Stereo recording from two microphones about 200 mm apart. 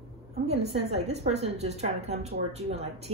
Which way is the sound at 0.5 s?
30° right (ahead or behind).